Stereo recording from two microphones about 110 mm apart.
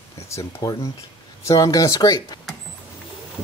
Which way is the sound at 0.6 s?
35° left (ahead or behind).